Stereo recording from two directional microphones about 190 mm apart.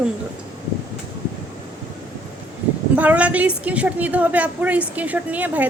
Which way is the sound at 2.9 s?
10° right (ahead or behind).